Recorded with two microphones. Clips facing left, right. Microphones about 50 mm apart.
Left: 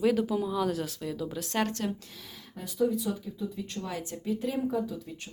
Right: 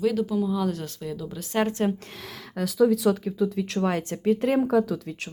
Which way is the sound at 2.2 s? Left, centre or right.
Right.